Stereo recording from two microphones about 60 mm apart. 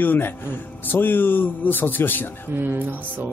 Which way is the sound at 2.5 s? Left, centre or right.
Right.